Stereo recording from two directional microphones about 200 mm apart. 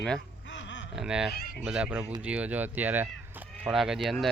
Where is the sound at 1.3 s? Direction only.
50° left (ahead or behind).